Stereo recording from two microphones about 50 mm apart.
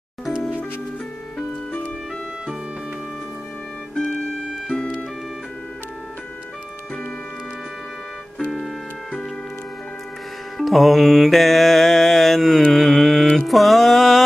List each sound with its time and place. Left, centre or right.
3.9 s music: centre
8.5 s organ: centre
10.6 s music: centre
12.7 s mantra: centre